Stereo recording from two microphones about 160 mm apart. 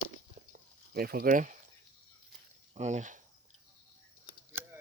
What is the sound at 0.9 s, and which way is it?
Speech, 70° right (ahead or behind).